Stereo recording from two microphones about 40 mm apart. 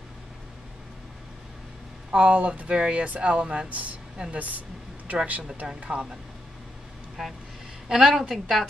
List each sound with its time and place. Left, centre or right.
2.0 s speech: right
3.6 s speech: right
7.2 s a woman's voice: centre